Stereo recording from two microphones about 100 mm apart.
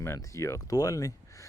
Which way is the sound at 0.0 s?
25° left (ahead or behind).